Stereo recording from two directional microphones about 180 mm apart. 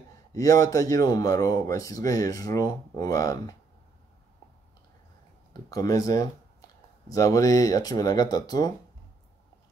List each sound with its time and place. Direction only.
0.3 s a man's voice: 20° left (ahead or behind)
5.5 s a man's voice: 20° left (ahead or behind)